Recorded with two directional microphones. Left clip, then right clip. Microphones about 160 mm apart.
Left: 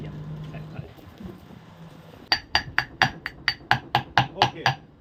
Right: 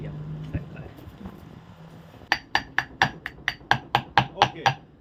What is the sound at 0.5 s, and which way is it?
Music, 45° right (ahead or behind).